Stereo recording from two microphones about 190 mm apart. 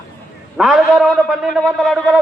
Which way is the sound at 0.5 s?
5° right (ahead or behind).